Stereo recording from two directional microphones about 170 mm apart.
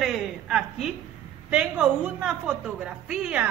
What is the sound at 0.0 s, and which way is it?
A woman's voice, centre (ahead or behind).